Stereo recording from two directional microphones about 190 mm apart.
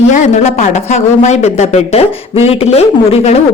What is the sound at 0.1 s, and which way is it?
Speech, 40° left (ahead or behind).